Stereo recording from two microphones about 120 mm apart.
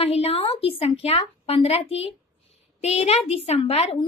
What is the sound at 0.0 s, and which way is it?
A woman's voice, 55° left (ahead or behind).